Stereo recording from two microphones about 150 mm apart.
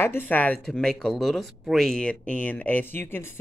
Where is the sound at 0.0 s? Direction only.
15° left (ahead or behind).